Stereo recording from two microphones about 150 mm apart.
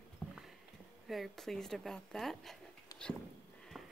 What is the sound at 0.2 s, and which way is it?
Clip-clop, 10° left (ahead or behind).